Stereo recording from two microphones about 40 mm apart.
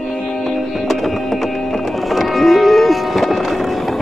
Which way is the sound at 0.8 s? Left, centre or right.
Centre.